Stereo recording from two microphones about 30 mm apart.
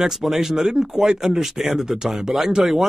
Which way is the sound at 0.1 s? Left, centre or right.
Centre.